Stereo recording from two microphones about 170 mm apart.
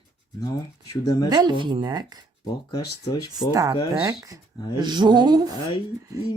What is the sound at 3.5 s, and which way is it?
Speech, 20° right (ahead or behind).